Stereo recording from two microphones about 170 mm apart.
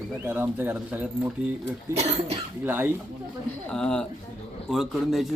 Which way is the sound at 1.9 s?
40° right (ahead or behind).